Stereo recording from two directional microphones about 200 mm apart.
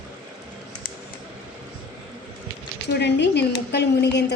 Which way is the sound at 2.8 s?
60° left (ahead or behind).